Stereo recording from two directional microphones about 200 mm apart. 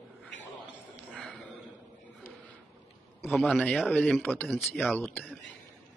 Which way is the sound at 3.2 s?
10° left (ahead or behind).